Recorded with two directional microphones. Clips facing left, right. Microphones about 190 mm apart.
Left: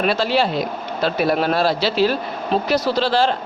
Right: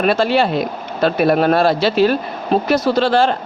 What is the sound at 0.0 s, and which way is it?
Speech, 50° right (ahead or behind).